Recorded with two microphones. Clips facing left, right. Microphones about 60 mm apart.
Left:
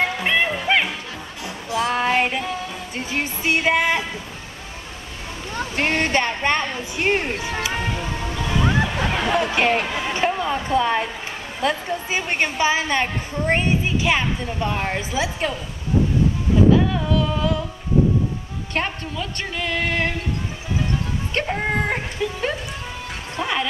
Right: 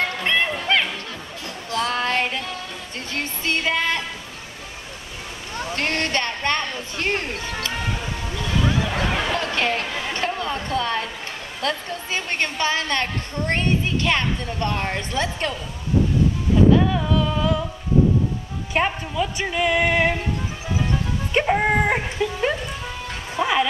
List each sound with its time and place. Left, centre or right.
0.0 s music: centre
1.7 s a woman's voice: centre
5.6 s a woman's voice: centre
16.7 s music: centre
18.7 s music: centre
21.3 s music: centre
23.3 s speech: centre